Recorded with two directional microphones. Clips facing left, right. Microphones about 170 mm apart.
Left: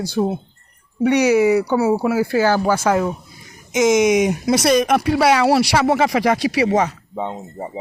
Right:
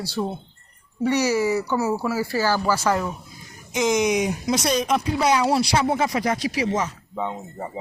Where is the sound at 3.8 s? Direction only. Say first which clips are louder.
Left 6 dB; 80° left.